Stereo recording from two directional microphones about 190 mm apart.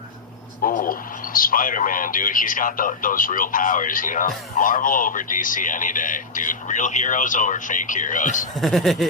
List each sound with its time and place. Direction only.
0.6 s speech: 45° left (ahead or behind)
8.6 s speech: centre (ahead or behind)